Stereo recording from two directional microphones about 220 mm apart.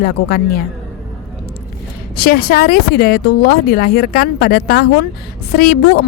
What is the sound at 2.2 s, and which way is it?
A woman's voice, 40° left (ahead or behind).